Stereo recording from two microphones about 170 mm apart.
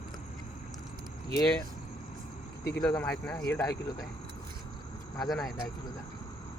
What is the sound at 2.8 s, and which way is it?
Speech, 20° left (ahead or behind).